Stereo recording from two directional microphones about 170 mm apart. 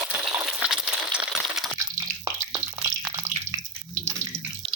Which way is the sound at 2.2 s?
20° right (ahead or behind).